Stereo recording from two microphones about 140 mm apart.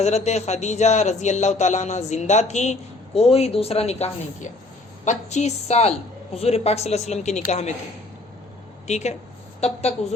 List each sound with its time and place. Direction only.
0.0 s a woman's voice: 50° left (ahead or behind)
8.9 s a woman's voice: 55° left (ahead or behind)